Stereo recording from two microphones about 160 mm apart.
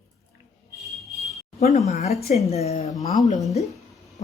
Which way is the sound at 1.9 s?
45° left (ahead or behind).